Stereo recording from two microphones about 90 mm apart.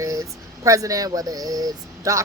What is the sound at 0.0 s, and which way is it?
Speech, 35° right (ahead or behind).